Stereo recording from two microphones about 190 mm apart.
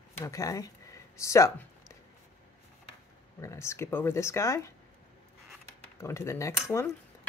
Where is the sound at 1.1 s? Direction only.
15° left (ahead or behind).